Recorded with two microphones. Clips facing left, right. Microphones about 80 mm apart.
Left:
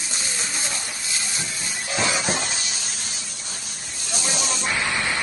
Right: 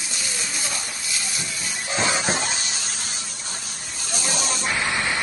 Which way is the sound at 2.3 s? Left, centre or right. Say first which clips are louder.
Right 1 dB; right.